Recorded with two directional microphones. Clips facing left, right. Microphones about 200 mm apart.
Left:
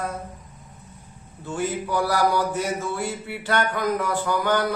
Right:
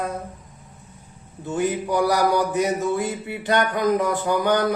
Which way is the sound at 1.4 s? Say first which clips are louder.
Right 4 dB; 20° right (ahead or behind).